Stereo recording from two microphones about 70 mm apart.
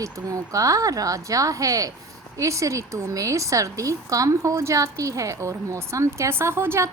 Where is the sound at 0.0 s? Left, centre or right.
Right.